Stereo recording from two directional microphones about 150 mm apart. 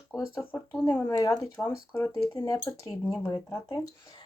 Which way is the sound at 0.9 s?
15° left (ahead or behind).